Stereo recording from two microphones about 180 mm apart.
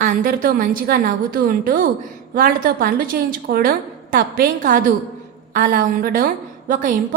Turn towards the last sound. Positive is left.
turn(degrees=-50)  # may be behind; listen again after turning